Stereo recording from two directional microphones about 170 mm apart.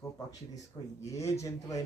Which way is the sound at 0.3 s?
20° left (ahead or behind).